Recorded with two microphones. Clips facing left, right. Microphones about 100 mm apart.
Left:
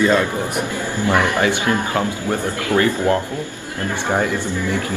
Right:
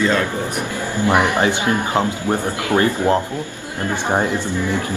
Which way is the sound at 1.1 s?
20° right (ahead or behind).